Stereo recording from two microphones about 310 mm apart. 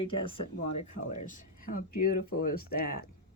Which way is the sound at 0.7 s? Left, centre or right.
Left.